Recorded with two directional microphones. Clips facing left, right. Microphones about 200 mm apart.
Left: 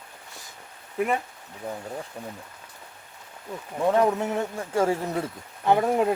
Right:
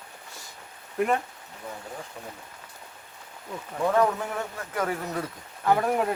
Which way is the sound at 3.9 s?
25° left (ahead or behind).